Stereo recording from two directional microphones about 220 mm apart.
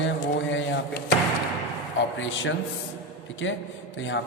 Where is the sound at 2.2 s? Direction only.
60° left (ahead or behind).